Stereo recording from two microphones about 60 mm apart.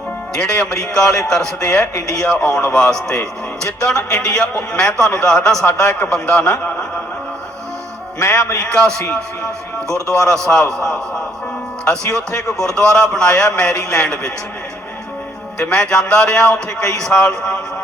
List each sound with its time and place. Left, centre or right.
0.3 s a man's voice: centre
8.2 s a man's voice: left
8.6 s a man's voice: centre
10.2 s a man's voice: centre
15.7 s a man's voice: centre
17.1 s a man's voice: left